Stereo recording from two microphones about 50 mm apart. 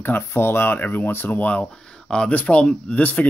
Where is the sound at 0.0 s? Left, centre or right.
Left.